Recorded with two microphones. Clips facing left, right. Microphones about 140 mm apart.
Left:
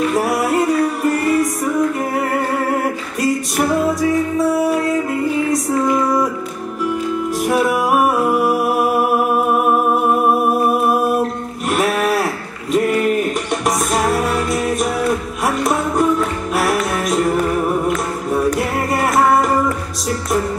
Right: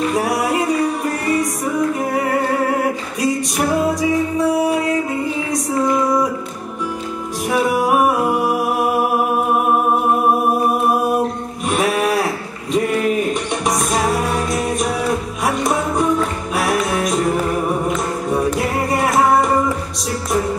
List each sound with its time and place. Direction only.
0.1 s music: centre (ahead or behind)
7.4 s music: centre (ahead or behind)
11.7 s a sound: centre (ahead or behind)
12.7 s music: centre (ahead or behind)